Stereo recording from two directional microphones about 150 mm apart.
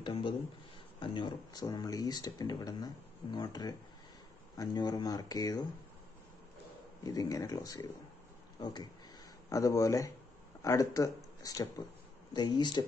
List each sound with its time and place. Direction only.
0.0 s speech: 35° left (ahead or behind)
7.0 s speech: 25° left (ahead or behind)